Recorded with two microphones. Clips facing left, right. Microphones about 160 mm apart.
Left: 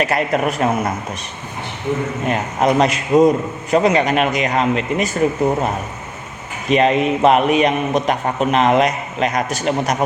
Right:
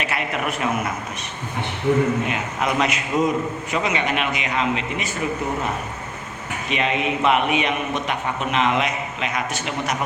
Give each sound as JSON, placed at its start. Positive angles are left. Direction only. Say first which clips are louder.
{"t": 0.0, "sound": "a man's voice", "louder": "left 8 dB", "side_deg": 40}
{"t": 2.2, "sound": "a man's voice", "louder": "left 7 dB", "side_deg": 40}
{"t": 6.7, "sound": "a man's voice", "louder": "left 9 dB", "side_deg": 40}